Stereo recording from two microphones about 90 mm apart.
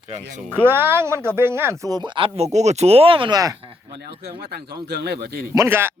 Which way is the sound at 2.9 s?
85° right.